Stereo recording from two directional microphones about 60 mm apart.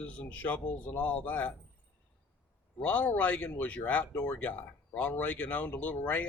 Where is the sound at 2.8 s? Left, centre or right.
Left.